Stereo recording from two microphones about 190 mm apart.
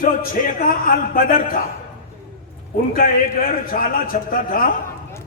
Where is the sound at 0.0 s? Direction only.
45° left (ahead or behind).